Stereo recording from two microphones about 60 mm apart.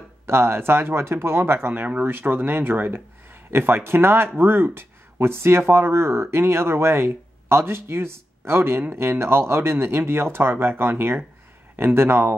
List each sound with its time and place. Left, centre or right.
0.3 s speech: right